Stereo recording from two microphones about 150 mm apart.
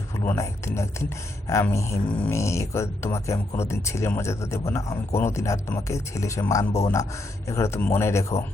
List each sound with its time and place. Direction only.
0.3 s speech: 20° left (ahead or behind)